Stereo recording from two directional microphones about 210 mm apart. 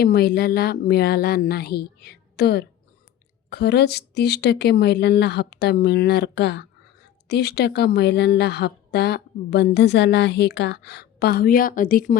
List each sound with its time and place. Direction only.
0.0 s a woman's voice: 45° left (ahead or behind)